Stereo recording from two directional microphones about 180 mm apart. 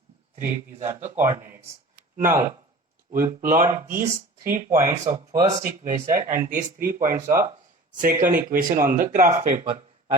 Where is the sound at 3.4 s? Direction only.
50° right (ahead or behind).